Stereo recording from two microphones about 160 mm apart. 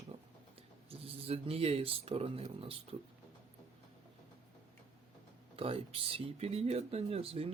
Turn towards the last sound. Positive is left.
turn(degrees=-35)  # may be behind; listen again after turning